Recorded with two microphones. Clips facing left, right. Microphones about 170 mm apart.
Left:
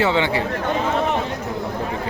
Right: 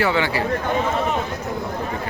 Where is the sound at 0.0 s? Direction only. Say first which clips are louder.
Left 1 dB; 20° left (ahead or behind).